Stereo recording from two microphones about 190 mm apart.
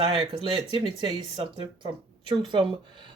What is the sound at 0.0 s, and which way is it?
Speech, 25° right (ahead or behind).